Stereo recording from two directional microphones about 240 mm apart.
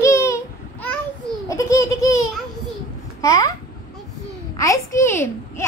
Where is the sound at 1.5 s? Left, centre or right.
Centre.